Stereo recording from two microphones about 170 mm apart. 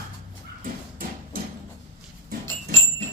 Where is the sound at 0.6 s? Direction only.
55° right (ahead or behind).